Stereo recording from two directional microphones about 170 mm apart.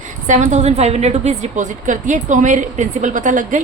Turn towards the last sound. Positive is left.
turn(degrees=-50)  # may be behind; listen again after turning